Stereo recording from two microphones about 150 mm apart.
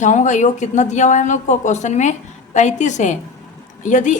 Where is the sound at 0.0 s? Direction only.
55° left (ahead or behind).